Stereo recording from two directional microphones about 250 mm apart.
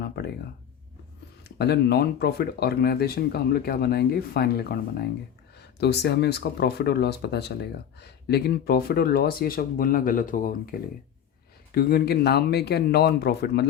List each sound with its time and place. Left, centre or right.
1.5 s speech: left